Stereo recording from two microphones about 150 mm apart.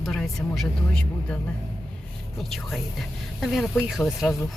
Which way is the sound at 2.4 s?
Centre (ahead or behind).